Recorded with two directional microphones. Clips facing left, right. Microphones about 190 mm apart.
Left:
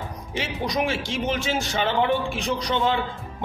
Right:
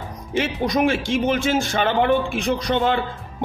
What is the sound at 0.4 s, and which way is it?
A man's voice, 55° right (ahead or behind).